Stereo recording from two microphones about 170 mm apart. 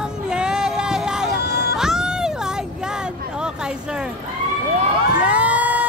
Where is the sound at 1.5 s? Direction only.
65° left (ahead or behind).